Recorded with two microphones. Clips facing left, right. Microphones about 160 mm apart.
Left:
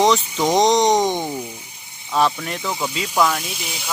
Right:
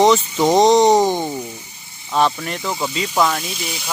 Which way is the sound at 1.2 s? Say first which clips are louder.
Right 1 dB; 15° left (ahead or behind).